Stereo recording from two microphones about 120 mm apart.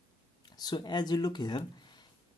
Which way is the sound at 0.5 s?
35° left (ahead or behind).